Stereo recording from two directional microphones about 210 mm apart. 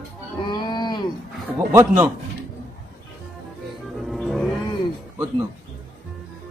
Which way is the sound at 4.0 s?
Centre (ahead or behind).